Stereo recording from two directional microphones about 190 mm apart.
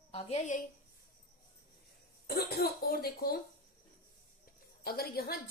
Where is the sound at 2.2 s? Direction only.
55° left (ahead or behind).